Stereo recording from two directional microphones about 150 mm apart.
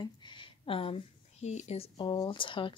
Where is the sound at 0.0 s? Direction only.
30° left (ahead or behind); by 1.9 s 45° left (ahead or behind).